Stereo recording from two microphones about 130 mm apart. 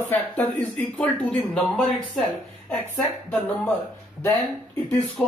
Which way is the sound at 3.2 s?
10° left (ahead or behind).